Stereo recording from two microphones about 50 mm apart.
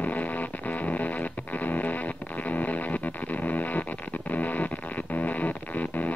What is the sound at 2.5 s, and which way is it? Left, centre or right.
Music, left.